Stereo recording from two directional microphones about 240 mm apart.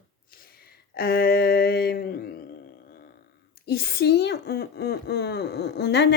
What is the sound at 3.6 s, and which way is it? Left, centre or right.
A woman's voice, left.